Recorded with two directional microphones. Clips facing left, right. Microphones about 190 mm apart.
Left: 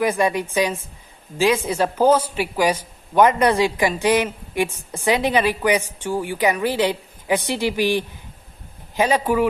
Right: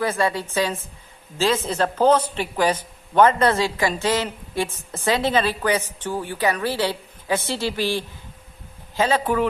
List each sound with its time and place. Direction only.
0.0 s speech: 15° left (ahead or behind)